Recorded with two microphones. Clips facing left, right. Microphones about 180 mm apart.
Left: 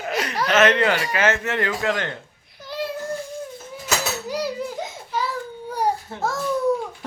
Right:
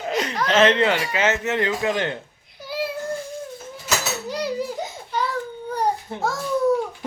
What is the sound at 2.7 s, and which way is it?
Child singing, 10° right (ahead or behind).